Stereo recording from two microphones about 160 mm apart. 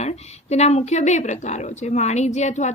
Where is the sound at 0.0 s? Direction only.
40° left (ahead or behind).